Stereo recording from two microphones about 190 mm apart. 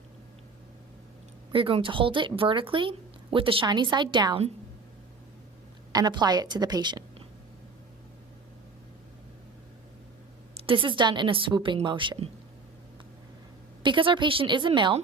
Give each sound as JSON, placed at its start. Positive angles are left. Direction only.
{"t": 1.5, "sound": "speech", "side_deg": -30}
{"t": 5.9, "sound": "a woman's voice", "side_deg": -20}
{"t": 10.5, "sound": "speech", "side_deg": -30}
{"t": 13.8, "sound": "speech", "side_deg": -25}